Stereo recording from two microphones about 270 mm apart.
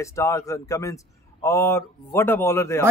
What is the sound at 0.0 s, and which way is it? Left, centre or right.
A man's voice, centre.